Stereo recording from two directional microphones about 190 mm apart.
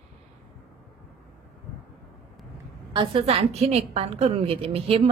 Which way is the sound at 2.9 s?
30° right (ahead or behind).